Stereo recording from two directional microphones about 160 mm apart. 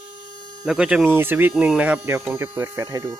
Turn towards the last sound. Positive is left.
turn(degrees=-20)  # may be behind; listen again after turning